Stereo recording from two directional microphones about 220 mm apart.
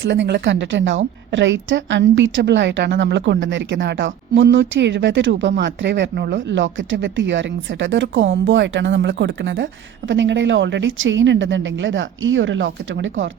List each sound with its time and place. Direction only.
0.0 s a woman's voice: 55° right (ahead or behind)